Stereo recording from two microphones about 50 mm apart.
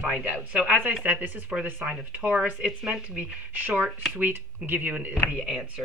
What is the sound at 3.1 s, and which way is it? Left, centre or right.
Speech, right.